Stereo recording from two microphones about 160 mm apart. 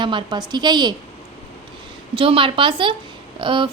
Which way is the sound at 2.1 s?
35° right (ahead or behind).